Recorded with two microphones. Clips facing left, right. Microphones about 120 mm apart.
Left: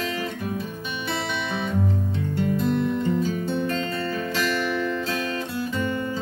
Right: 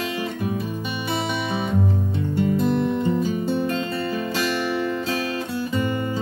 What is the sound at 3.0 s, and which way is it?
Music, 10° right (ahead or behind).